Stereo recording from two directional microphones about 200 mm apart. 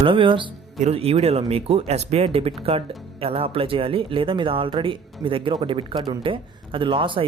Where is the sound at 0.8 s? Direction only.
30° right (ahead or behind).